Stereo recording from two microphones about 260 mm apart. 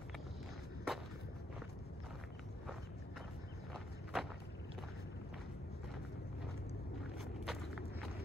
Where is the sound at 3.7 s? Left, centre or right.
Centre.